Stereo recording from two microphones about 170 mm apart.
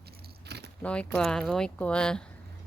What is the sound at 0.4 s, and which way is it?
Keys jangling, 75° right (ahead or behind).